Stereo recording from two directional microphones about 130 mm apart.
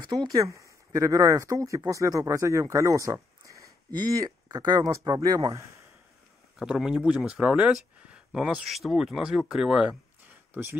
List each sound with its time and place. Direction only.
0.1 s speech: 35° right (ahead or behind)
0.4 s speech: 25° right (ahead or behind)
6.6 s speech: 5° right (ahead or behind)